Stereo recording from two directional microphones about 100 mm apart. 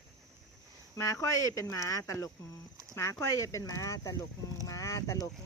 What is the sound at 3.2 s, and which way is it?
Speech, 30° left (ahead or behind).